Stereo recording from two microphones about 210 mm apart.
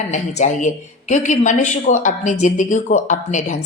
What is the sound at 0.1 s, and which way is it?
Speech, 35° left (ahead or behind).